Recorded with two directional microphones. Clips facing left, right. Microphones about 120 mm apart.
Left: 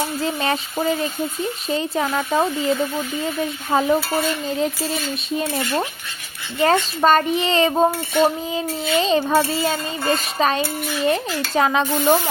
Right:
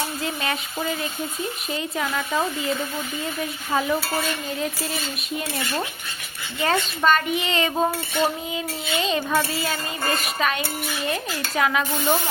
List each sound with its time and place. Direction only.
0.2 s speech: 35° left (ahead or behind)
3.7 s speech: 35° left (ahead or behind)
6.6 s speech: 35° left (ahead or behind)